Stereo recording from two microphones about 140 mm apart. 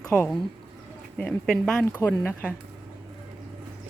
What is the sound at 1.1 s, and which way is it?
Speech, 5° left (ahead or behind).